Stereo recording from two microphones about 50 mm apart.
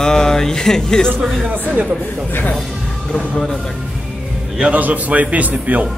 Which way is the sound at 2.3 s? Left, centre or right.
Left.